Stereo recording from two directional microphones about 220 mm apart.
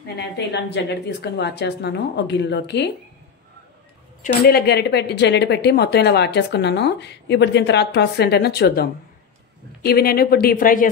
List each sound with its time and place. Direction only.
0.5 s speech: 50° left (ahead or behind)
4.2 s speech: 40° left (ahead or behind)